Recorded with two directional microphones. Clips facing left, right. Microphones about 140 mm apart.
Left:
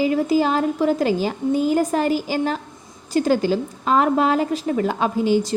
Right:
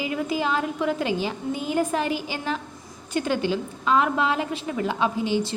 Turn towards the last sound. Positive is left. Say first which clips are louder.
# left 5 dB
turn(degrees=45)  # may be behind; listen again after turning